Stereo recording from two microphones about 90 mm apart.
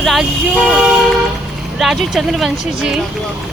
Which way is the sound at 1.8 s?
Centre (ahead or behind).